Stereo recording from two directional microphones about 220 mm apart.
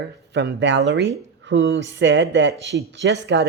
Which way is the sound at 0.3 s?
55° right (ahead or behind).